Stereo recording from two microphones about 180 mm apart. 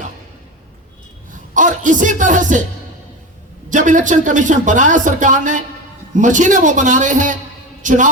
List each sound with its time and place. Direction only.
1.5 s speech: 45° right (ahead or behind)
3.7 s a man's voice: 45° right (ahead or behind)